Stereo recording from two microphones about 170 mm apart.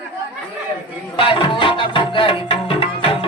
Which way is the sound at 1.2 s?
30° left (ahead or behind).